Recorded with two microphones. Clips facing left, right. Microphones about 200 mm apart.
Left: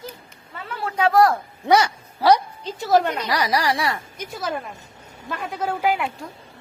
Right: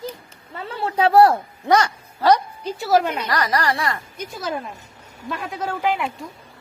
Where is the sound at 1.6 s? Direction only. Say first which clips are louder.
Even; 10° left (ahead or behind).